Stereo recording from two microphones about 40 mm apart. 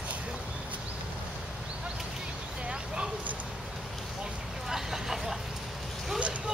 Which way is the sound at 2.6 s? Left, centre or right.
Right.